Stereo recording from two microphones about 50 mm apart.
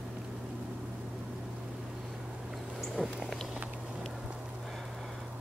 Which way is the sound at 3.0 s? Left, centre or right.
Centre.